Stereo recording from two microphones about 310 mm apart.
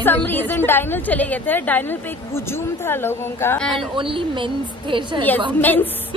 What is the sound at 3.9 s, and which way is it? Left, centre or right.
Speech, centre.